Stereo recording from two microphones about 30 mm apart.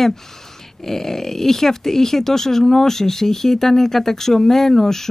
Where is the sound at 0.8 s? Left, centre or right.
Centre.